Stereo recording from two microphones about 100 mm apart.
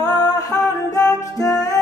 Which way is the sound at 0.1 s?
40° left (ahead or behind).